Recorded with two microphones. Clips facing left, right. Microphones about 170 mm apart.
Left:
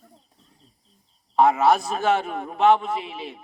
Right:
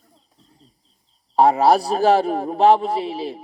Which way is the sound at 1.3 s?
35° right (ahead or behind).